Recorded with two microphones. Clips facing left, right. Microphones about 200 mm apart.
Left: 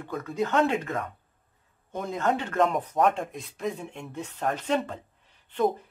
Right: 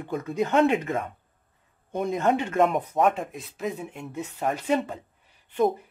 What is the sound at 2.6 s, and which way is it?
Speech, centre (ahead or behind).